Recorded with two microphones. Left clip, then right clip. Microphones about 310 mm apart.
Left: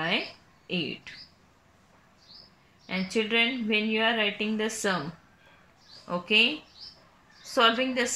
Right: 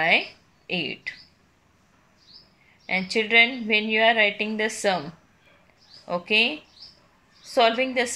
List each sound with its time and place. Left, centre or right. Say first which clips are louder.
0.7 s a woman's voice: right 4 dB; centre
2.9 s a woman's voice: right 6 dB; centre
6.0 s a woman's voice: right 2 dB; centre